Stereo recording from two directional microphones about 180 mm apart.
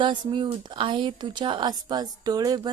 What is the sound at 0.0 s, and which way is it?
Speech, 25° right (ahead or behind).